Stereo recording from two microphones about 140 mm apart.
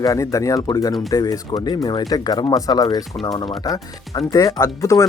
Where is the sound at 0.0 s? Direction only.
25° left (ahead or behind).